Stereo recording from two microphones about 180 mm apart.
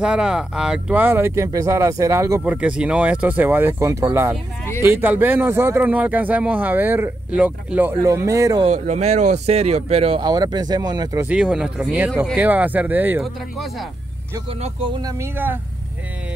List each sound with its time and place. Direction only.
0.0 s speech: 5° right (ahead or behind)
8.6 s speech: 40° right (ahead or behind); by 11.2 s 20° right (ahead or behind)
11.2 s speech: 5° right (ahead or behind)
12.4 s speech: 10° right (ahead or behind)
14.6 s speech: 30° right (ahead or behind); by 15.6 s 10° right (ahead or behind)